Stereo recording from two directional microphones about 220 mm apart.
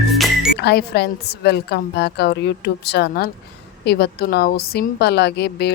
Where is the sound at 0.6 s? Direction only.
45° left (ahead or behind).